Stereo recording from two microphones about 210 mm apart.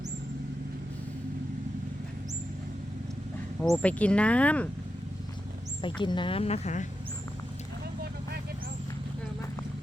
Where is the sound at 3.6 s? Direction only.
5° left (ahead or behind).